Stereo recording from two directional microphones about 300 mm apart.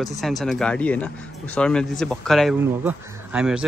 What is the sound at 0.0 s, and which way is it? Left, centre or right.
A man's voice, centre.